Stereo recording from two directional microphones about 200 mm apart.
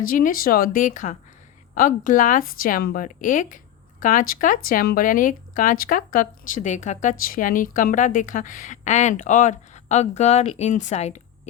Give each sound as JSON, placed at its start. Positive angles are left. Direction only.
{"t": 0.0, "sound": "speech", "side_deg": 45}